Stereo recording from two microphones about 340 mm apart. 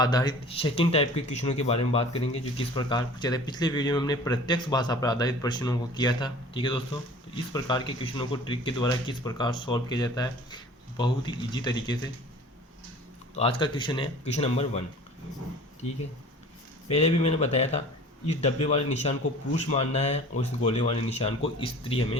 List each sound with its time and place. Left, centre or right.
0.0 s speech: centre
13.3 s speech: centre
16.9 s speech: centre